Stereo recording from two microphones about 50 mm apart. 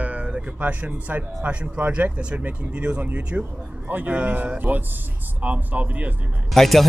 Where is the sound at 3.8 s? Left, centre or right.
Right.